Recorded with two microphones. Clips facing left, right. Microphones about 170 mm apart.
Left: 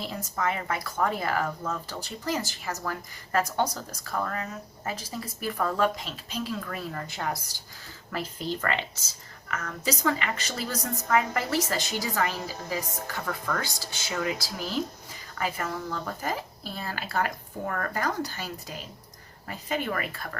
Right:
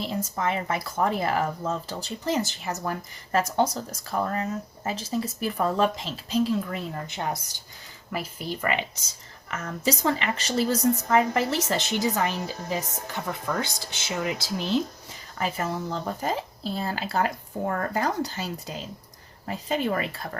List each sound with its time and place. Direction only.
0.0 s speech: 25° right (ahead or behind)
9.5 s speech: 30° right (ahead or behind)